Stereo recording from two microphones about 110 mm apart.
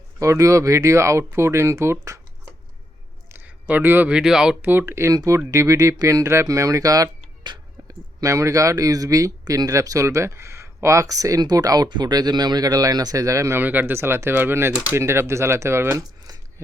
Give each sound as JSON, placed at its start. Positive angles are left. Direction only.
{"t": 0.2, "sound": "speech", "side_deg": -30}
{"t": 3.3, "sound": "speech", "side_deg": -15}
{"t": 4.6, "sound": "speech", "side_deg": -20}
{"t": 14.9, "sound": "speech", "side_deg": -25}